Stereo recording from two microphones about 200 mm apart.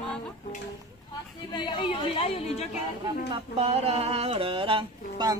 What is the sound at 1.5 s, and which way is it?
A woman's voice, 20° left (ahead or behind).